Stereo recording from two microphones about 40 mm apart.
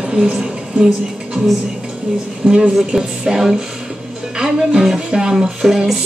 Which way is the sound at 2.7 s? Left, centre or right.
Centre.